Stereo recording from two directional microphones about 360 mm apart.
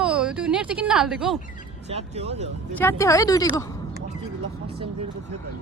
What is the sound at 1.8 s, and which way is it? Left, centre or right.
Speech, centre.